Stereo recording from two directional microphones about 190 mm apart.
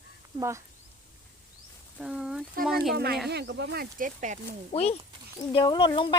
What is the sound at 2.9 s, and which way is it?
Speech, 55° right (ahead or behind).